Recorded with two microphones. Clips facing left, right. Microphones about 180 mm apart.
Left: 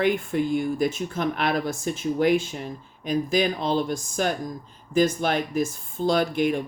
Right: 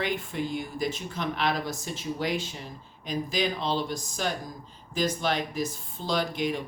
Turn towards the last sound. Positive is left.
turn(degrees=50)  # may be behind; listen again after turning